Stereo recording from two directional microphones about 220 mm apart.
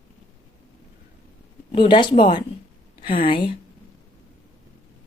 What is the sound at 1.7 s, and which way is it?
Speech, 20° left (ahead or behind).